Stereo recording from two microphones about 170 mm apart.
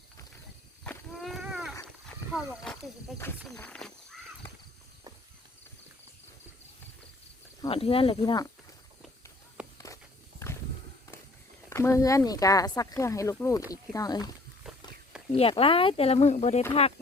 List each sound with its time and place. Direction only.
0.9 s a sound: centre (ahead or behind)
1.8 s wild animals: 5° left (ahead or behind)
3.5 s speech: 5° left (ahead or behind)
7.7 s speech: 35° left (ahead or behind)
8.2 s speech: 20° left (ahead or behind)
9.7 s walk: 20° left (ahead or behind)
11.7 s speech: 15° left (ahead or behind)
15.4 s speech: 35° left (ahead or behind)